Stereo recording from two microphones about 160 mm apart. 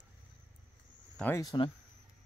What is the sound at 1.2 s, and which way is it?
Speech, 15° left (ahead or behind).